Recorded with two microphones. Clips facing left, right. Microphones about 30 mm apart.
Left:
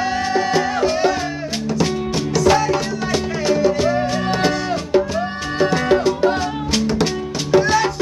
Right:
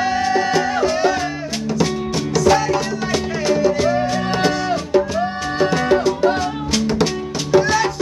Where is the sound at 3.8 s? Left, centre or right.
Centre.